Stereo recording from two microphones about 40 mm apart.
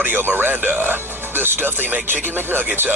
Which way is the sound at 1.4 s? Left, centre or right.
Right.